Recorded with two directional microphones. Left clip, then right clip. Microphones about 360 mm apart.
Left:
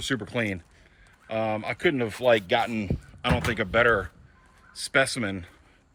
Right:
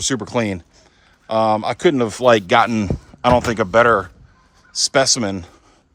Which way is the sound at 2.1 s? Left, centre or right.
Right.